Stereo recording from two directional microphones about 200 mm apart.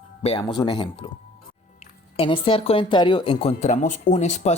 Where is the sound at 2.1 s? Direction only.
25° left (ahead or behind).